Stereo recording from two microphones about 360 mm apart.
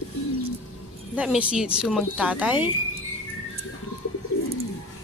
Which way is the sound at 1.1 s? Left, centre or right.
Centre.